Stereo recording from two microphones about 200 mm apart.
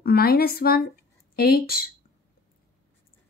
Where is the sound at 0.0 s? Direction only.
50° left (ahead or behind).